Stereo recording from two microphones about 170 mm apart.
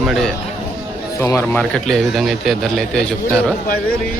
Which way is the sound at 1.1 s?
15° left (ahead or behind).